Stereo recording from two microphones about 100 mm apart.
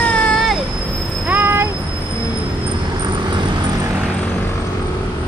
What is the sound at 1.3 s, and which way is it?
Vehicle, 20° right (ahead or behind).